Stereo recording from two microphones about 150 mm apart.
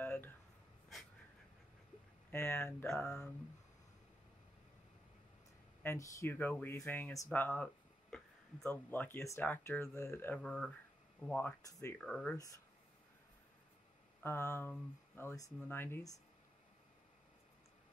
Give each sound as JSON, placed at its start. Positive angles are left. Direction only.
{"t": 0.0, "sound": "a sound", "side_deg": 15}
{"t": 2.3, "sound": "speech", "side_deg": 15}
{"t": 5.8, "sound": "speech", "side_deg": 15}
{"t": 7.3, "sound": "a sound", "side_deg": 10}
{"t": 8.6, "sound": "speech", "side_deg": 15}
{"t": 10.4, "sound": "speech", "side_deg": 5}
{"t": 11.3, "sound": "speech", "side_deg": 15}
{"t": 14.2, "sound": "speech", "side_deg": 15}